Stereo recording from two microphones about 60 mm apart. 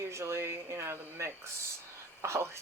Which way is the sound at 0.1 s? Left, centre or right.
Right.